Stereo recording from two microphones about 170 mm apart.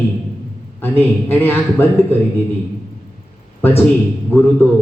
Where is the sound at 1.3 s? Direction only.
15° left (ahead or behind).